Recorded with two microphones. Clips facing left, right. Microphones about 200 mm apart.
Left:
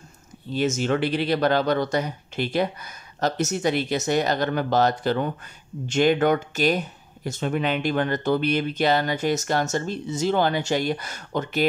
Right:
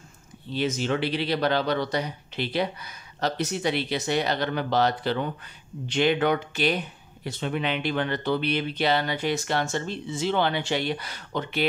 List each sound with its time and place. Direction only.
0.5 s speech: 45° left (ahead or behind)